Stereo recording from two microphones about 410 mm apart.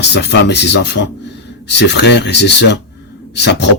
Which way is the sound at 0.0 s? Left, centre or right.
Left.